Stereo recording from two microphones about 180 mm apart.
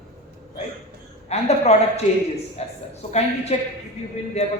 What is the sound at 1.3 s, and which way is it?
A man's voice, 35° left (ahead or behind).